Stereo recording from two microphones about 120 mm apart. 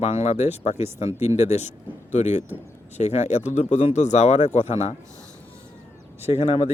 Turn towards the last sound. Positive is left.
turn(degrees=65)  # may be behind; listen again after turning